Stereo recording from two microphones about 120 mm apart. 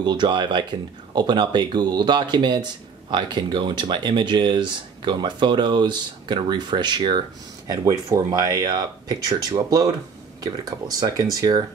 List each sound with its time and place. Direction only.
0.0 s speech: 40° right (ahead or behind)